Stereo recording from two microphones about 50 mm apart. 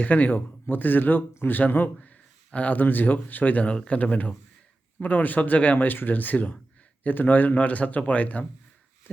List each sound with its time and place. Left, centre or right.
0.0 s speech: left
2.0 s speech: left